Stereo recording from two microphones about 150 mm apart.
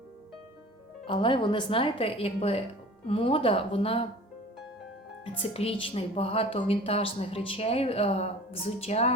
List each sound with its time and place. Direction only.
1.0 s a woman's voice: 35° left (ahead or behind)
5.4 s a woman's voice: 40° left (ahead or behind)